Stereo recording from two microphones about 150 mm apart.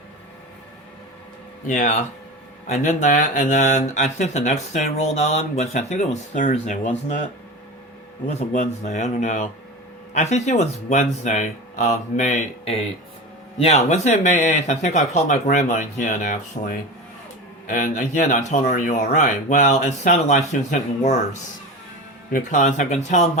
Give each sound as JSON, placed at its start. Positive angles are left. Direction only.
{"t": 1.6, "sound": "speech", "side_deg": 60}
{"t": 8.3, "sound": "speech", "side_deg": 50}
{"t": 22.3, "sound": "speech", "side_deg": 60}